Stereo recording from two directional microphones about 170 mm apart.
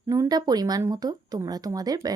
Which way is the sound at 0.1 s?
20° right (ahead or behind).